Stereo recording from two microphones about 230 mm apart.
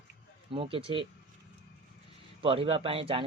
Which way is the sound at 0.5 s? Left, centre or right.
Right.